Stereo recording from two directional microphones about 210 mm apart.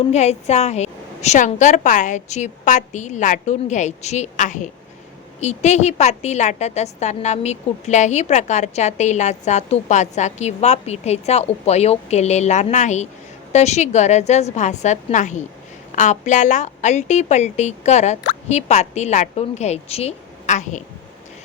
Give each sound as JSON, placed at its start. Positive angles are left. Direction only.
{"t": 0.0, "sound": "a woman's voice", "side_deg": 30}